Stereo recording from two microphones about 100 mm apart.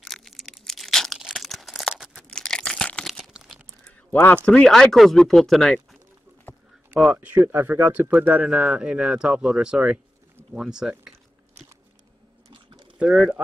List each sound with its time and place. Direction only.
0.0 s a sound: centre (ahead or behind)
3.3 s tearing: 10° right (ahead or behind)
4.1 s speech: 20° left (ahead or behind)
4.5 s speech: 10° left (ahead or behind)
6.5 s a sound: 20° left (ahead or behind)
7.2 s speech: 15° right (ahead or behind)
13.0 s speech: 15° right (ahead or behind)